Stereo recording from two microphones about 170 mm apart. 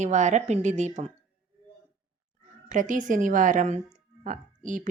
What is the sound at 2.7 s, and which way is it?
A woman's voice, 50° right (ahead or behind).